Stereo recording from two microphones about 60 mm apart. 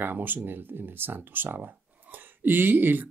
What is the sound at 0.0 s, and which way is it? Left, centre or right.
Speech, right.